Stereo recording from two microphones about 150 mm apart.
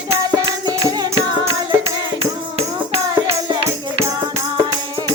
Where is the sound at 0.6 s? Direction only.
25° right (ahead or behind).